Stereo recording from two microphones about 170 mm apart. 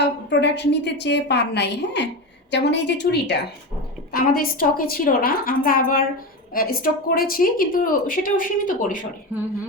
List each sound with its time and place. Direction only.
0.0 s a woman's voice: 90° left
4.1 s a woman's voice: 60° left (ahead or behind)
9.3 s speech: 10° right (ahead or behind)